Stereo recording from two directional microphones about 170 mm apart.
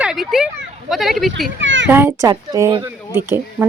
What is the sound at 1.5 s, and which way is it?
Speech, 90° right.